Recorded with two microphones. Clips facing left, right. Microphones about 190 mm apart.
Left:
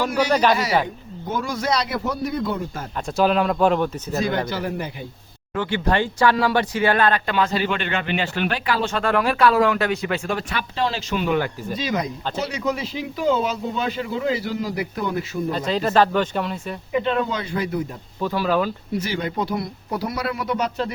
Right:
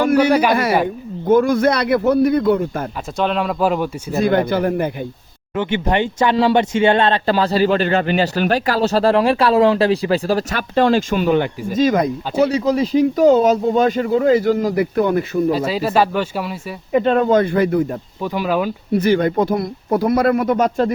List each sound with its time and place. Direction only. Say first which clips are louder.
0.0 s a sound: right 7 dB; 55° right (ahead or behind)
0.5 s a man's voice: right 5 dB; 55° right (ahead or behind)
3.2 s speech: even; centre (ahead or behind)
4.2 s a man's voice: right 8 dB; 55° right (ahead or behind)
5.5 s speech: right 3 dB; 20° right (ahead or behind); by 11.3 s 50° right (ahead or behind)
11.3 s speech: right 5 dB; 25° right (ahead or behind)
11.7 s speech: right 12 dB; 45° right (ahead or behind)
12.5 s speech: right 9 dB; 35° right (ahead or behind); by 15.5 s 60° right (ahead or behind)
15.5 s speech: right 2 dB; 5° right (ahead or behind)
16.9 s speech: right 8 dB; 45° right (ahead or behind)
18.2 s speech: right 1 dB; 15° right (ahead or behind)
18.9 s speech: right 10 dB; 55° right (ahead or behind)